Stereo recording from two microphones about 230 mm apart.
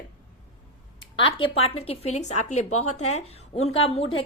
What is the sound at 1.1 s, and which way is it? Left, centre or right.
A woman's voice, left.